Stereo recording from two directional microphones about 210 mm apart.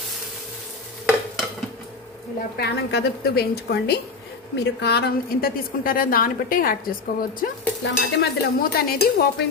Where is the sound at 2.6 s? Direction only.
50° left (ahead or behind).